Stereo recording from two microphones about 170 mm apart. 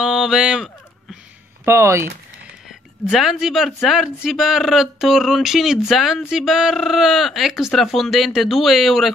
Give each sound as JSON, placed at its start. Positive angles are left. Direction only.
{"t": 0.0, "sound": "speech", "side_deg": -5}
{"t": 1.6, "sound": "speech", "side_deg": -15}
{"t": 3.1, "sound": "a man's voice", "side_deg": 0}